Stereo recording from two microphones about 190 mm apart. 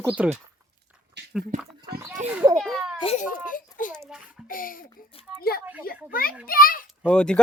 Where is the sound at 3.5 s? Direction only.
45° left (ahead or behind).